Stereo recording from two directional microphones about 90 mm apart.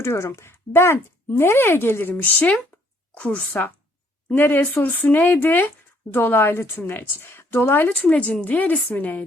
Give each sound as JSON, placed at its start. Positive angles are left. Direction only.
{"t": 0.0, "sound": "a woman's voice", "side_deg": 30}